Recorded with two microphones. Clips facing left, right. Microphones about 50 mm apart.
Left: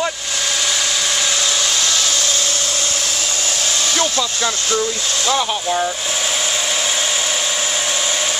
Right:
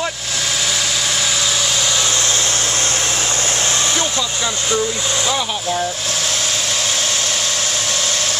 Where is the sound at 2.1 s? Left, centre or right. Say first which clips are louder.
Right 1 dB; right.